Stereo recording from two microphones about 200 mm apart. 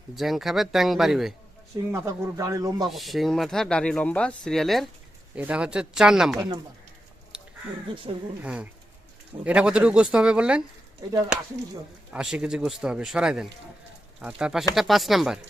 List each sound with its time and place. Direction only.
0.2 s speech: centre (ahead or behind)
1.9 s speech: 15° right (ahead or behind)
2.9 s speech: centre (ahead or behind)
7.3 s a sound: 5° right (ahead or behind)
8.4 s speech: 5° right (ahead or behind)
12.1 s speech: 5° right (ahead or behind)